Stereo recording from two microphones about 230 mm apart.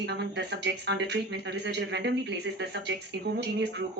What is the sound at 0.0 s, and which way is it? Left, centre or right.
Speech, right.